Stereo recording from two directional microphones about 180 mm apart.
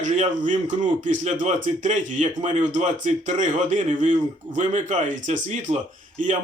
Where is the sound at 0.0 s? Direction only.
45° right (ahead or behind).